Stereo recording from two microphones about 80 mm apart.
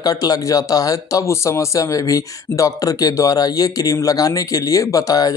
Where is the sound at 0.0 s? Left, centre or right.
Left.